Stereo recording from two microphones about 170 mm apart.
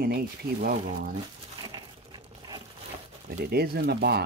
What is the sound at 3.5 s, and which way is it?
Speech, 65° right (ahead or behind).